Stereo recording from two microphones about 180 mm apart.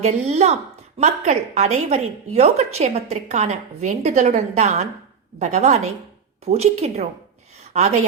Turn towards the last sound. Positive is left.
turn(degrees=-40)  # may be behind; listen again after turning